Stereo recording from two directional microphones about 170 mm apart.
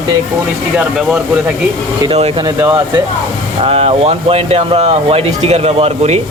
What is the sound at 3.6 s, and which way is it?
Speech, 35° right (ahead or behind).